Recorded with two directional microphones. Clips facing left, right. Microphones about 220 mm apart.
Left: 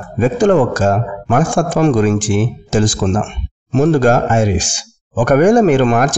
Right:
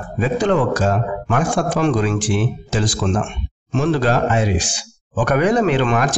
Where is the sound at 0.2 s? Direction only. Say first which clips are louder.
Left 6 dB; 50° left (ahead or behind).